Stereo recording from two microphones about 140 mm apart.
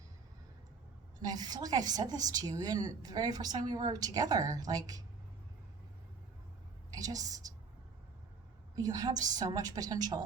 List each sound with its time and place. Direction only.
1.2 s a woman's voice: 30° right (ahead or behind)
6.9 s a woman's voice: 25° right (ahead or behind)
8.7 s a woman's voice: 25° right (ahead or behind)